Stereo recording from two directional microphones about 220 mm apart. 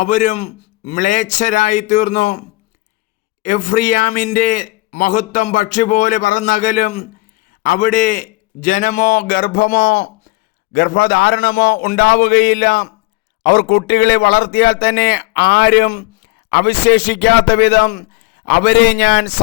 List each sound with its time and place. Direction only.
0.0 s a man's voice: 35° left (ahead or behind)
3.4 s a man's voice: 35° left (ahead or behind)